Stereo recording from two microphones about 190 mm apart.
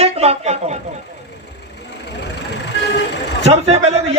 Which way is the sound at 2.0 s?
65° left (ahead or behind).